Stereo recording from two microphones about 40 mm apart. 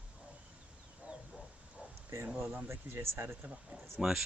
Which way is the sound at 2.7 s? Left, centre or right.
Right.